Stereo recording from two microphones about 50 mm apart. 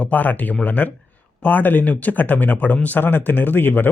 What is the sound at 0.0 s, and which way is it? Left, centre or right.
A man's voice, left.